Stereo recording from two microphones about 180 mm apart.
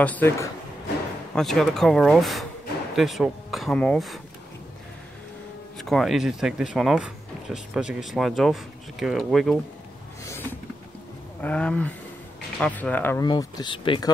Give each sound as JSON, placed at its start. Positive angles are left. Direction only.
{"t": 0.0, "sound": "speech", "side_deg": 10}
{"t": 5.8, "sound": "speech", "side_deg": 0}
{"t": 10.2, "sound": "a sound", "side_deg": 15}
{"t": 11.4, "sound": "speech", "side_deg": 5}
{"t": 13.2, "sound": "speech", "side_deg": 25}